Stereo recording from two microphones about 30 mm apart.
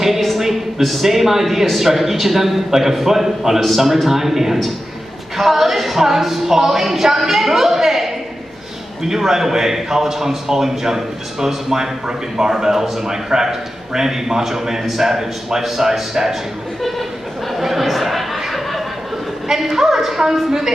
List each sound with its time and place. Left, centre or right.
0.0 s a sound: centre
0.4 s a man's voice: centre
17.6 s chatter: centre
19.4 s a man's voice: centre